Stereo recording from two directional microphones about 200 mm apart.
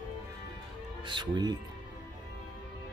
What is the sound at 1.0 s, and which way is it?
Speech, 25° right (ahead or behind).